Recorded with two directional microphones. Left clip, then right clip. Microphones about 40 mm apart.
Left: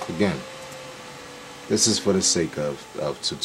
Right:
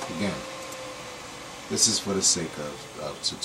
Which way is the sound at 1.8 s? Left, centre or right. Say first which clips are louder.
Left 2 dB; right.